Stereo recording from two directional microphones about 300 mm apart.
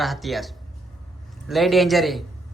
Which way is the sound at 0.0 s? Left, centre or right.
Centre.